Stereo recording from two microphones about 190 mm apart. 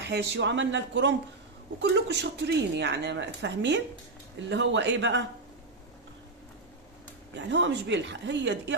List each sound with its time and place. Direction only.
0.1 s a woman's voice: 65° right (ahead or behind)
7.3 s speech: 70° right (ahead or behind)